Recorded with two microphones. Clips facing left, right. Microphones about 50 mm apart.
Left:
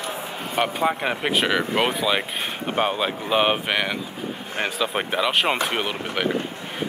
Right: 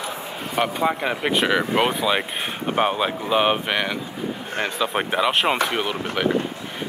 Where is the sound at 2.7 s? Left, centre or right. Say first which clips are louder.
Right 2 dB; centre.